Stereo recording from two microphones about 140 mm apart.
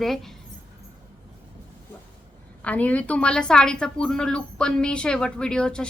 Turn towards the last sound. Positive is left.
turn(degrees=5)  # may be behind; listen again after turning